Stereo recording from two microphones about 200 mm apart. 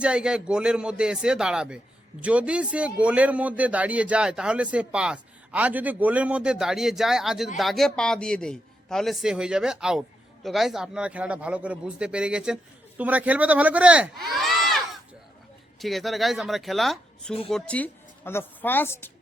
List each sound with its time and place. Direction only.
0.0 s a man's voice: 5° right (ahead or behind)
15.8 s a man's voice: centre (ahead or behind)